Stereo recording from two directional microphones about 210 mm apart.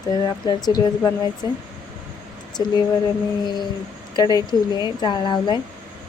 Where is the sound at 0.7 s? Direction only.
20° left (ahead or behind).